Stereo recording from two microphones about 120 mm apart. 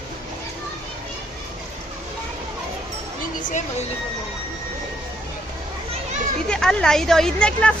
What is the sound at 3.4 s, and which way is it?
Speech, 90° left.